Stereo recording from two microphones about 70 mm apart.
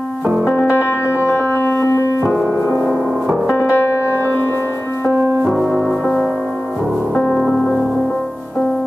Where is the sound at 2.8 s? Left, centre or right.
Centre.